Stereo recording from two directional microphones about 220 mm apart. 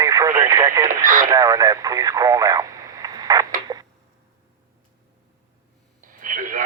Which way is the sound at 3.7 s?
20° right (ahead or behind).